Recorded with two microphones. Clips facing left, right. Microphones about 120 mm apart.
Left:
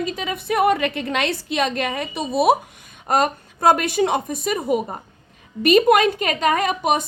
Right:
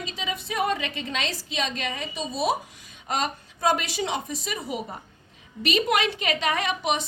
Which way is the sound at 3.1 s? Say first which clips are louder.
Left 8 dB; 50° left (ahead or behind).